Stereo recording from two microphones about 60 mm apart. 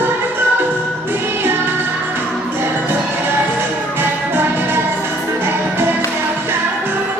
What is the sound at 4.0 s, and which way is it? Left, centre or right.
Music, right.